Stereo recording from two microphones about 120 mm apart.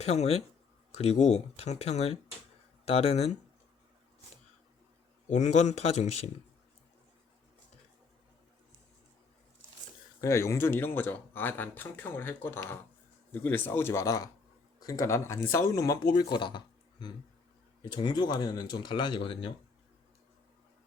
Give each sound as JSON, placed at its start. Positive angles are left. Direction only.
{"t": 0.0, "sound": "speech", "side_deg": 65}
{"t": 5.3, "sound": "speech", "side_deg": 75}
{"t": 10.2, "sound": "speech", "side_deg": 25}